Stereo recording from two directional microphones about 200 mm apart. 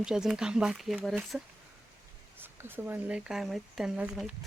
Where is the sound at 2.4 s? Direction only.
10° right (ahead or behind).